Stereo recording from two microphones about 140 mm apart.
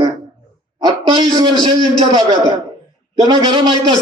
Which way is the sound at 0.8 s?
30° right (ahead or behind).